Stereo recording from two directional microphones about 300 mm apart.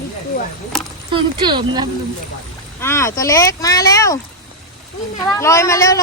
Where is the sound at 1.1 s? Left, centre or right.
Centre.